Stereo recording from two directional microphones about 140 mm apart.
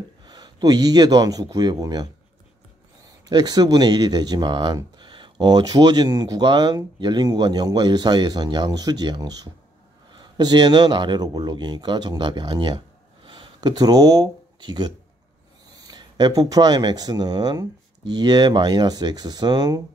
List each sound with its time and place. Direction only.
0.2 s speech: 30° right (ahead or behind)
3.1 s speech: 30° right (ahead or behind)